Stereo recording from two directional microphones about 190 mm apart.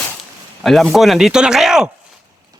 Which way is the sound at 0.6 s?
Centre (ahead or behind).